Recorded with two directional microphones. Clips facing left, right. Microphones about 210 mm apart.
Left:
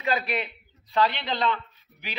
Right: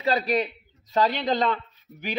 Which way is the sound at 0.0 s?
35° right (ahead or behind).